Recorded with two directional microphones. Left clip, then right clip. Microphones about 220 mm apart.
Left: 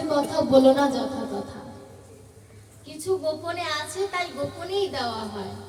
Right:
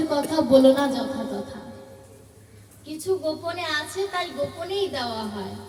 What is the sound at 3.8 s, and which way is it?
Speech, 35° right (ahead or behind).